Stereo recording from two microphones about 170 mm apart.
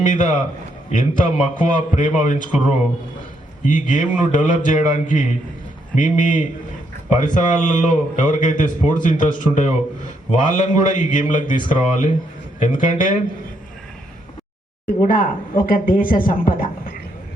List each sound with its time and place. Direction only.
0.0 s a man's voice: 50° left (ahead or behind)
15.0 s speech: 55° left (ahead or behind)